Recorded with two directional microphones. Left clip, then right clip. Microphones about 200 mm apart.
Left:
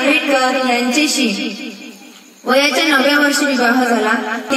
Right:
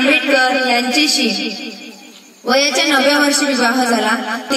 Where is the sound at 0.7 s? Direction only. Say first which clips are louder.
Right 1 dB; 45° left (ahead or behind).